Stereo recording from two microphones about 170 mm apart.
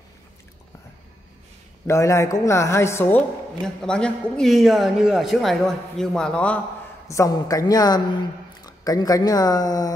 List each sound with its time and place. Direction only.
1.9 s speech: 15° left (ahead or behind)
3.6 s a man's voice: 5° left (ahead or behind)
7.1 s a woman's voice: 20° left (ahead or behind)